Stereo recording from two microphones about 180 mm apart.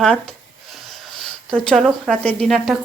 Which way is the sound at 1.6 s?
Centre (ahead or behind).